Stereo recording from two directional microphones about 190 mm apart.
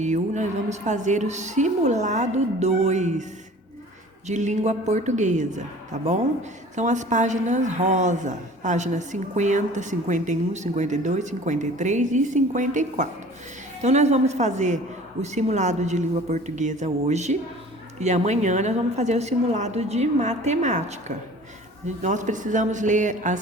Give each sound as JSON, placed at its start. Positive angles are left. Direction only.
{"t": 0.0, "sound": "a woman's voice", "side_deg": -40}
{"t": 4.3, "sound": "a woman's voice", "side_deg": -40}